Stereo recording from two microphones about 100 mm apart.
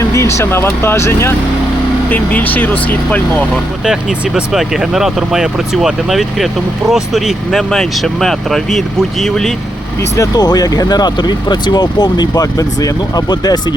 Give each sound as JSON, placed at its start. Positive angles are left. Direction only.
{"t": 0.1, "sound": "speech", "side_deg": 30}
{"t": 4.4, "sound": "speech", "side_deg": -5}
{"t": 10.2, "sound": "speech", "side_deg": 40}